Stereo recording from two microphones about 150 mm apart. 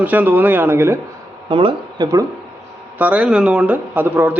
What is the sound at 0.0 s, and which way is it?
Speech, 10° right (ahead or behind).